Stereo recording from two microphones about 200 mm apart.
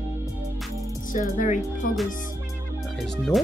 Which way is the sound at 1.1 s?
40° left (ahead or behind).